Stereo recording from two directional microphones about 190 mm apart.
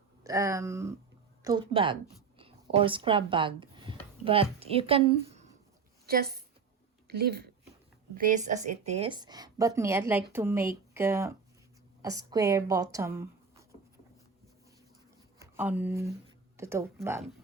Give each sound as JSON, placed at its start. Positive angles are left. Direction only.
{"t": 0.2, "sound": "a woman's voice", "side_deg": -15}
{"t": 2.4, "sound": "a sound", "side_deg": -30}
{"t": 4.6, "sound": "a woman's voice", "side_deg": -30}
{"t": 6.1, "sound": "a woman's voice", "side_deg": -55}
{"t": 8.1, "sound": "a woman's voice", "side_deg": -45}
{"t": 15.4, "sound": "speech", "side_deg": -10}